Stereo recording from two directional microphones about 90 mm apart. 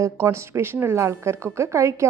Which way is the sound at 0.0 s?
30° right (ahead or behind).